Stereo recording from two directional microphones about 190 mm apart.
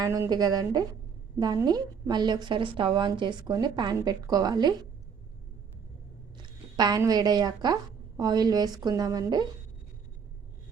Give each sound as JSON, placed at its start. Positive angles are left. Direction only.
{"t": 0.0, "sound": "a woman's voice", "side_deg": -20}
{"t": 6.3, "sound": "speech", "side_deg": -20}